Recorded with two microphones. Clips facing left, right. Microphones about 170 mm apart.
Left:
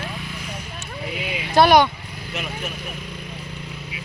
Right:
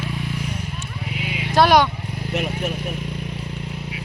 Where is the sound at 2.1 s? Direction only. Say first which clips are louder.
Right 6 dB; 60° right (ahead or behind).